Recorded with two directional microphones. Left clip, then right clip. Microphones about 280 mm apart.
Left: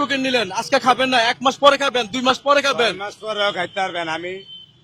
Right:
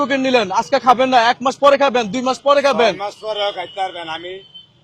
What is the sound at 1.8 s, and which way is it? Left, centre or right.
Speech, centre.